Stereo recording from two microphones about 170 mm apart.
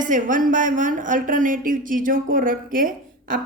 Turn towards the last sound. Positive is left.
turn(degrees=-55)  # may be behind; listen again after turning